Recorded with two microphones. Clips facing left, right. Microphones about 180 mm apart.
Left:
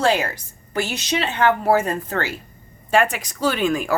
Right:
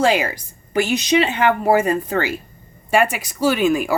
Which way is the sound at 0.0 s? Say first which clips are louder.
Right 2 dB; 10° right (ahead or behind).